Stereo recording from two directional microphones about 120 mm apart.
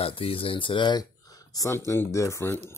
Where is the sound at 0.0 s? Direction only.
50° left (ahead or behind).